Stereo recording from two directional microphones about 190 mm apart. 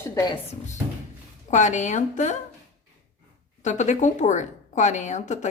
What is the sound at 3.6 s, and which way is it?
Speech, 40° left (ahead or behind).